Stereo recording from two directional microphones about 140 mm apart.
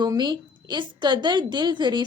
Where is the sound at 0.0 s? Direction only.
30° right (ahead or behind).